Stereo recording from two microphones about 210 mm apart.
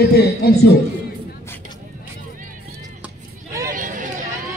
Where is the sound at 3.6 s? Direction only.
40° right (ahead or behind).